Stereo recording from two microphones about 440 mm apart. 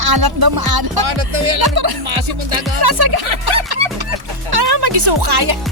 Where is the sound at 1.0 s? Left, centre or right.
Right.